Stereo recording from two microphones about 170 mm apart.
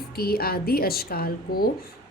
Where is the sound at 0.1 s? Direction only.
65° left (ahead or behind).